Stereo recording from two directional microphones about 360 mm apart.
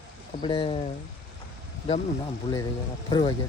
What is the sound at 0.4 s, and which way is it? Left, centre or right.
Speech, centre.